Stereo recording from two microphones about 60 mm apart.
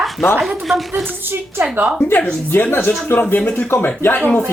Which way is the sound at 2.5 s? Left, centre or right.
Left.